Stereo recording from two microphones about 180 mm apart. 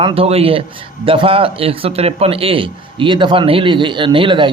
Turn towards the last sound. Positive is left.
turn(degrees=-25)  # may be behind; listen again after turning